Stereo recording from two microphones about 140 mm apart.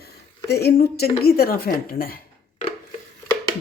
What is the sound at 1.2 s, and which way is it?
Speech, 90° left.